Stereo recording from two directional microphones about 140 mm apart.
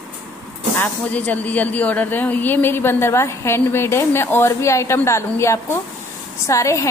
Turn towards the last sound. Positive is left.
turn(degrees=20)  # may be behind; listen again after turning